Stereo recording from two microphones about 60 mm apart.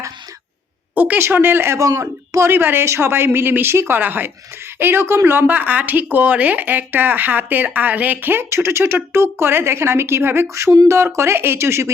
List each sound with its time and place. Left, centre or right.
0.9 s speech: right
1.2 s speech: right
1.8 s speech: right
2.5 s speech: right
5.5 s speech: right
8.4 s speech: right